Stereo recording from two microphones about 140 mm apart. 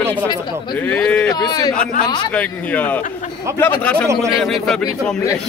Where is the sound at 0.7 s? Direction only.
10° left (ahead or behind).